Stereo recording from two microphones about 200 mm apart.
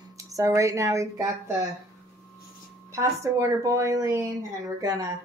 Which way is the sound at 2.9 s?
15° right (ahead or behind).